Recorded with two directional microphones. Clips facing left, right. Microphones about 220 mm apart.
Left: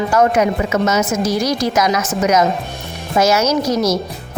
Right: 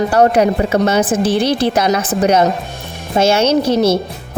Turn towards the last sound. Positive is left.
turn(degrees=-30)  # may be behind; listen again after turning